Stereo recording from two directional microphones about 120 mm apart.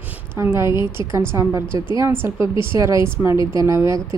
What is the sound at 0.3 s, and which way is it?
A woman's voice, 20° right (ahead or behind).